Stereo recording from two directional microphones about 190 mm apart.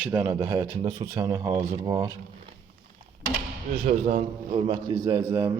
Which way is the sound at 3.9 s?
40° right (ahead or behind).